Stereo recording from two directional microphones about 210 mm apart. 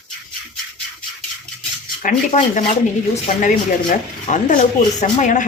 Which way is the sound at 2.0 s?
40° left (ahead or behind).